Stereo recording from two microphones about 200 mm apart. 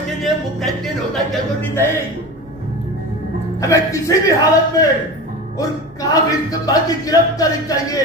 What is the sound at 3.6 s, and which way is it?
Speech, 15° left (ahead or behind).